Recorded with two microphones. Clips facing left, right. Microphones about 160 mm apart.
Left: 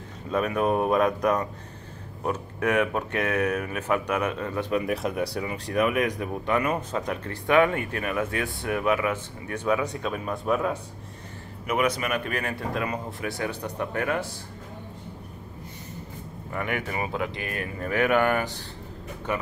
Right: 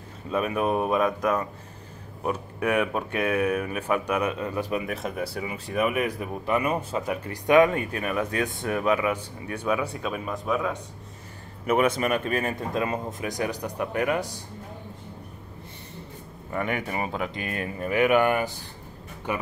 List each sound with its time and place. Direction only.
0.6 s speech: 5° right (ahead or behind)
1.2 s speech: 35° left (ahead or behind)
2.2 s speech: 15° right (ahead or behind)
3.4 s speech: 25° right (ahead or behind)
3.8 s speech: 15° right (ahead or behind)
7.4 s speech: 20° right (ahead or behind)
10.2 s speech: 5° left (ahead or behind)
11.6 s speech: 30° right (ahead or behind)
16.5 s speech: 25° right (ahead or behind)